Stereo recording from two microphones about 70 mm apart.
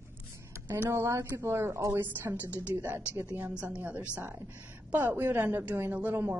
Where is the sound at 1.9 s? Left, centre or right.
Right.